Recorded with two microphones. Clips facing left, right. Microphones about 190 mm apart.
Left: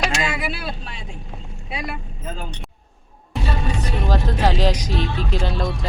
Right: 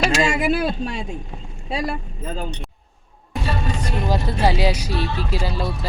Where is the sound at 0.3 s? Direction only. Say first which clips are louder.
Right 7 dB; 45° right (ahead or behind).